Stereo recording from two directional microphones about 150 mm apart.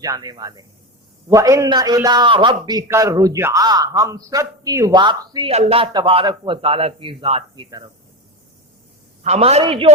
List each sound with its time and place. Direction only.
0.0 s a man's voice: 25° right (ahead or behind)
5.5 s a man's voice: 45° right (ahead or behind)
9.2 s a man's voice: 45° right (ahead or behind)